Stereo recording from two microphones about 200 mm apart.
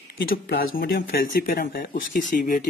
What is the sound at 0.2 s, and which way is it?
Speech, 45° left (ahead or behind).